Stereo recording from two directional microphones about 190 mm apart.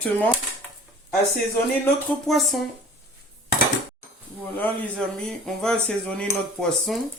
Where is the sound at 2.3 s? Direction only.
Centre (ahead or behind).